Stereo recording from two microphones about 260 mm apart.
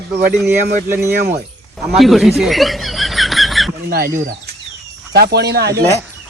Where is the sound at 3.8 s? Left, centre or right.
Right.